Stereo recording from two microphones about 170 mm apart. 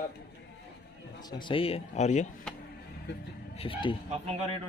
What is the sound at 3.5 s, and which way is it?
Speech, 30° left (ahead or behind).